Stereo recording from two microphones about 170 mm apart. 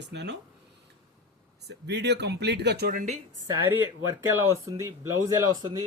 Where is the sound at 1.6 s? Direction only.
85° right; by 3.1 s 60° right (ahead or behind).